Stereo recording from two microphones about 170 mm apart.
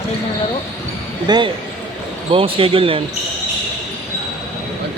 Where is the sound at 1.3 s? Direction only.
25° right (ahead or behind).